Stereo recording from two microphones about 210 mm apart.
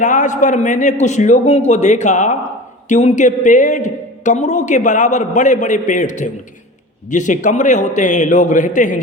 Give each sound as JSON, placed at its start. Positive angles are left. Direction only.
{"t": 0.0, "sound": "a man's voice", "side_deg": 35}